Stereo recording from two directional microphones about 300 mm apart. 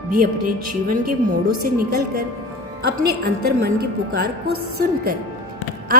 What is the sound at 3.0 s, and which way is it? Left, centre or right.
Speech, right.